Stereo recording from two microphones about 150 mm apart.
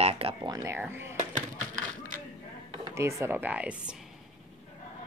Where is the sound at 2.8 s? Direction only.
20° right (ahead or behind).